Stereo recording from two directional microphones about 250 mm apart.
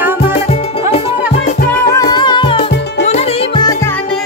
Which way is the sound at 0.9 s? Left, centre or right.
Left.